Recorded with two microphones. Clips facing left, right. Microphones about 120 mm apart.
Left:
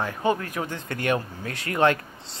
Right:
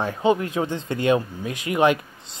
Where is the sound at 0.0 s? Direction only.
20° right (ahead or behind).